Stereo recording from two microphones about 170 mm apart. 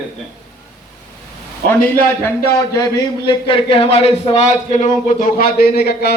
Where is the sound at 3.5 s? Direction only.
35° left (ahead or behind).